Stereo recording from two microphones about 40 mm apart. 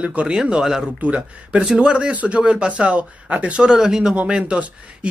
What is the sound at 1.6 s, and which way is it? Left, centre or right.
Speech, centre.